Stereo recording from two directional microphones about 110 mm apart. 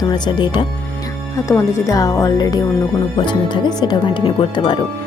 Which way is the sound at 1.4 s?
25° left (ahead or behind).